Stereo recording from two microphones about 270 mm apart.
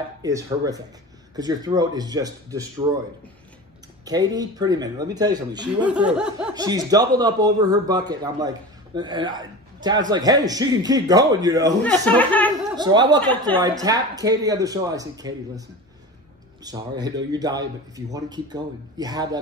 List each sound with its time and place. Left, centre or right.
0.2 s a man's voice: centre
4.0 s a man's voice: centre
5.9 s snicker: centre
6.5 s a man's voice: centre
11.8 s speech: centre
12.7 s a man's voice: centre
16.6 s a man's voice: centre